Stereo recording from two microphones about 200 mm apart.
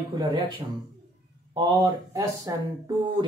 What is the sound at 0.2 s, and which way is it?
Speech, 20° right (ahead or behind).